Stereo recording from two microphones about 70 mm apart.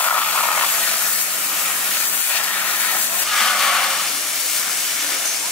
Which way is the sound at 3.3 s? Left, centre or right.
Centre.